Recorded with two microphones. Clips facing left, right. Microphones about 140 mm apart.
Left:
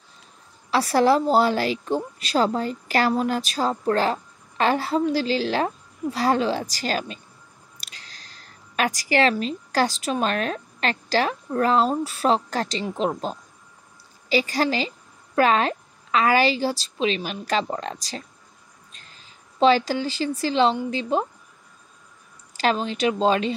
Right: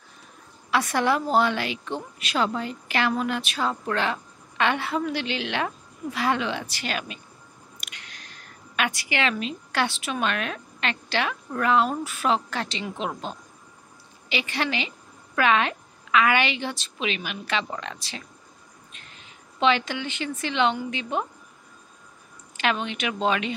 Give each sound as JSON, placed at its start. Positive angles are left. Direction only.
{"t": 0.7, "sound": "a woman's voice", "side_deg": 35}
{"t": 22.6, "sound": "a woman's voice", "side_deg": 35}